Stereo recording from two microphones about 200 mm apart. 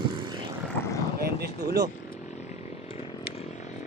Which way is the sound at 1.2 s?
50° right (ahead or behind).